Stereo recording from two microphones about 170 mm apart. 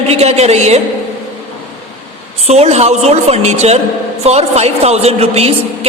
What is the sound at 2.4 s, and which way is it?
A woman's voice, 40° right (ahead or behind).